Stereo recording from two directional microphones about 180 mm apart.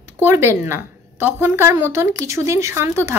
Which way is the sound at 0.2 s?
15° right (ahead or behind).